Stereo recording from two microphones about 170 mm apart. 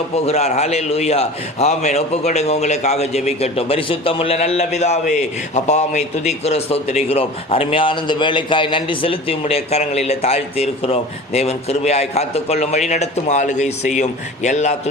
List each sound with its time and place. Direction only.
0.3 s a man's voice: 40° left (ahead or behind)